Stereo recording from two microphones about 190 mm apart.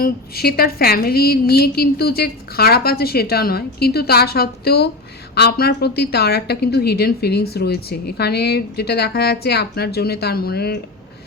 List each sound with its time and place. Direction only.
0.0 s a woman's voice: 55° left (ahead or behind)